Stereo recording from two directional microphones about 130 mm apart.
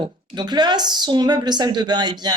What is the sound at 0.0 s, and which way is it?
A woman's voice, 35° right (ahead or behind).